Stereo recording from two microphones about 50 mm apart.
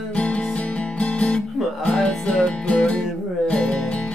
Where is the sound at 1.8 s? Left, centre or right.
Centre.